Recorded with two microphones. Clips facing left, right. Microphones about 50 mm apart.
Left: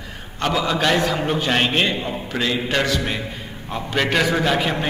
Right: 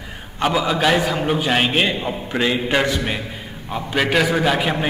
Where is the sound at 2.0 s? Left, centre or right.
Centre.